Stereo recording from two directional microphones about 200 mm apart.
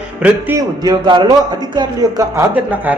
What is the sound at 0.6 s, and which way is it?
A man's voice, 20° right (ahead or behind).